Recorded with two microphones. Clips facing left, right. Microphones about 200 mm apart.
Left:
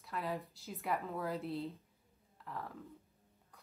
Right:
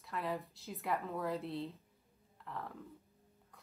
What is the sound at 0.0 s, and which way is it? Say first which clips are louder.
Speech: right 1 dB; centre (ahead or behind).